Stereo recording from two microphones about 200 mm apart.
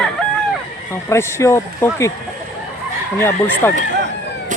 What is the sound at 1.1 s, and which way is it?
Speech, 15° left (ahead or behind).